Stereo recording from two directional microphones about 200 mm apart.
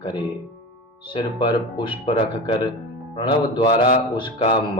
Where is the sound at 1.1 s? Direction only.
25° left (ahead or behind).